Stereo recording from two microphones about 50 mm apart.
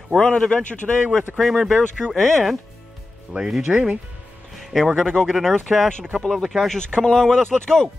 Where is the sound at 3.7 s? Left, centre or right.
Right.